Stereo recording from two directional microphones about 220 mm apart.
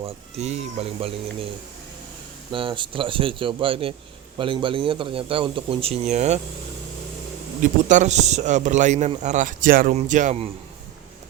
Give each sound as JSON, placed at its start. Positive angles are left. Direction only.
{"t": 0.0, "sound": "speech", "side_deg": -30}
{"t": 2.5, "sound": "speech", "side_deg": -20}
{"t": 7.9, "sound": "a man's voice", "side_deg": -35}